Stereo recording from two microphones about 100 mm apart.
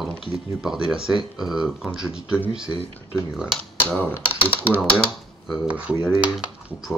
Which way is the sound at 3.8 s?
20° left (ahead or behind).